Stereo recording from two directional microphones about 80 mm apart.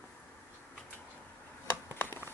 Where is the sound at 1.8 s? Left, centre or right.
Left.